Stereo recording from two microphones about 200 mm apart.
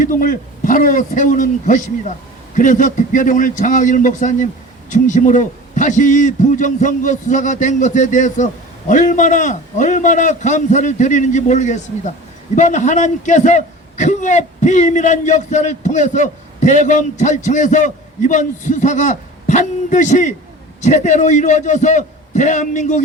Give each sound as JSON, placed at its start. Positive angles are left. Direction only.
{"t": 0.0, "sound": "a man's voice", "side_deg": 45}